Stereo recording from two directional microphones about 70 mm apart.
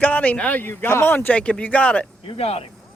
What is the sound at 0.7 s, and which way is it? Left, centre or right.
Speech, left.